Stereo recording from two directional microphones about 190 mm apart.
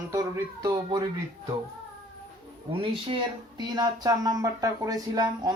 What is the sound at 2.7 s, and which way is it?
Speech, 30° right (ahead or behind).